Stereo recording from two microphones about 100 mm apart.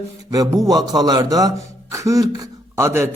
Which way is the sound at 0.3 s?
35° right (ahead or behind).